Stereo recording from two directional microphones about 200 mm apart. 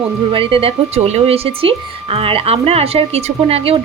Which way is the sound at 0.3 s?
25° right (ahead or behind).